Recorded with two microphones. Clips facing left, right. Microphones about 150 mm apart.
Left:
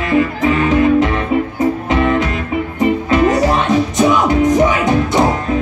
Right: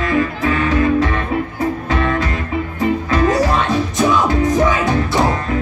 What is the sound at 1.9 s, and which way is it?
Music, 20° left (ahead or behind).